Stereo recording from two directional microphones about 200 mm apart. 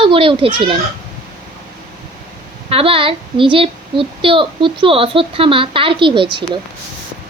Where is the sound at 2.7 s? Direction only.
25° right (ahead or behind).